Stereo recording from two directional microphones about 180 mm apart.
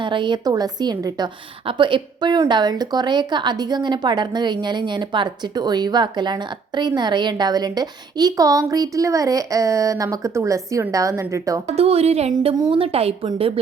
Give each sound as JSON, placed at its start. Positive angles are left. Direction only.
{"t": 0.0, "sound": "a woman's voice", "side_deg": -25}
{"t": 11.6, "sound": "a woman's voice", "side_deg": -35}